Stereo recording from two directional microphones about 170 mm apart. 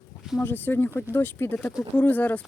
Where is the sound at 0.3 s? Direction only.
10° left (ahead or behind).